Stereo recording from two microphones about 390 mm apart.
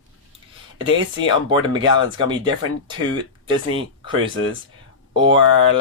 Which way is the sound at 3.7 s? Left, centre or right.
Centre.